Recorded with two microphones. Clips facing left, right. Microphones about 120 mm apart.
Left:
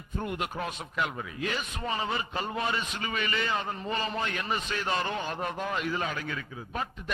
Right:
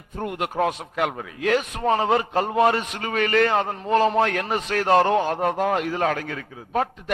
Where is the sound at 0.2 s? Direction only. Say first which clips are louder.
Right 9 dB; 65° right (ahead or behind).